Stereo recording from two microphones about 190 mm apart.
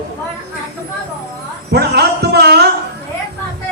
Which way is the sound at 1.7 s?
60° right (ahead or behind).